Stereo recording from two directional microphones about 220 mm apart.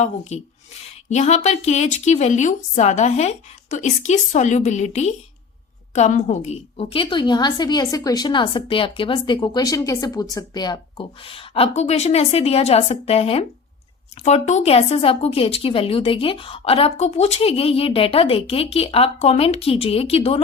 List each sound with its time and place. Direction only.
0.8 s a woman's voice: 30° left (ahead or behind)